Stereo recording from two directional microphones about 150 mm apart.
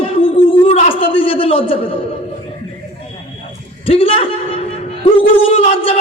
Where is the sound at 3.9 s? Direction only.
40° left (ahead or behind).